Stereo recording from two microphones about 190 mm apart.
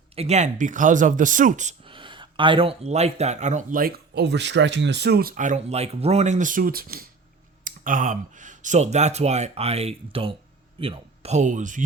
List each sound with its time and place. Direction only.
0.2 s speech: 35° right (ahead or behind)
1.8 s speech: 25° right (ahead or behind)